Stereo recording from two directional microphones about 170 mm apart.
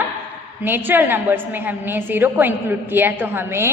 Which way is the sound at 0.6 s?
10° right (ahead or behind).